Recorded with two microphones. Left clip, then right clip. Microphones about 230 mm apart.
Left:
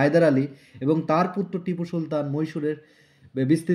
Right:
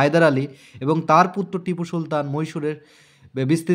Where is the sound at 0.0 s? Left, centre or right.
Right.